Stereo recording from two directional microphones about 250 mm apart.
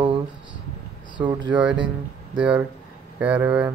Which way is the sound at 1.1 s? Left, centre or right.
Centre.